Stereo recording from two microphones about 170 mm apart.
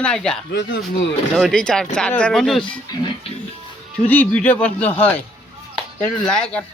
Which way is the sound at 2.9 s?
25° left (ahead or behind).